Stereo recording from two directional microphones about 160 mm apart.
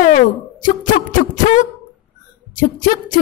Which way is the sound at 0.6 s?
55° left (ahead or behind).